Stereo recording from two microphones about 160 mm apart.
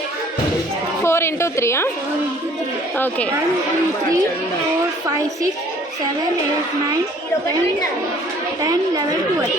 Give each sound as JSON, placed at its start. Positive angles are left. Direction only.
{"t": 1.0, "sound": "a woman's voice", "side_deg": 15}
{"t": 8.6, "sound": "a woman's voice", "side_deg": -25}